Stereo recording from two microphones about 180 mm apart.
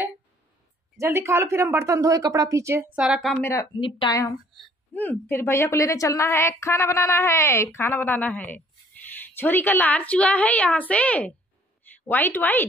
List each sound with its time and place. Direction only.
0.9 s a woman's voice: 15° right (ahead or behind)
3.7 s a woman's voice: 25° left (ahead or behind)
4.6 s a woman's voice: 10° left (ahead or behind)